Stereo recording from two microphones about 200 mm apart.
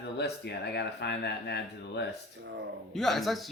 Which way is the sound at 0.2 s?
55° left (ahead or behind).